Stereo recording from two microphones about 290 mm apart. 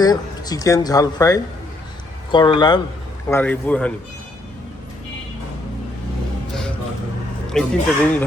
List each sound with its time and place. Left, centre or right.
0.0 s speech: centre
7.5 s speech: centre